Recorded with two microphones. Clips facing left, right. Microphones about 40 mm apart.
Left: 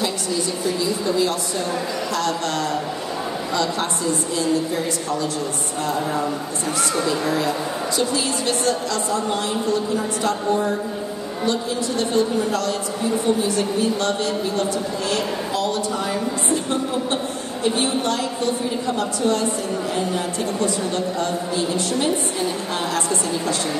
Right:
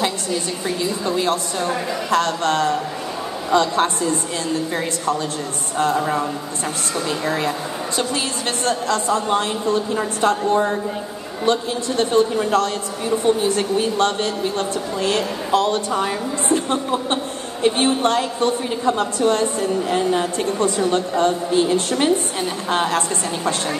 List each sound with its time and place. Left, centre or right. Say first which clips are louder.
1.0 s a woman's voice: right 2 dB; right
12.0 s a woman's voice: right 4 dB; right
17.7 s a woman's voice: right 5 dB; right